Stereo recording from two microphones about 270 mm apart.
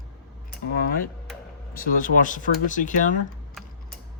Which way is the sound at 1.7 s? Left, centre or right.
Left.